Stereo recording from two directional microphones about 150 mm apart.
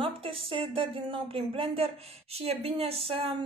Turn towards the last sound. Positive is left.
turn(degrees=-40)  # may be behind; listen again after turning